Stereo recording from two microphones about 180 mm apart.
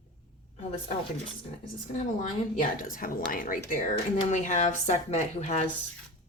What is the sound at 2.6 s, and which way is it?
Speech, 50° left (ahead or behind).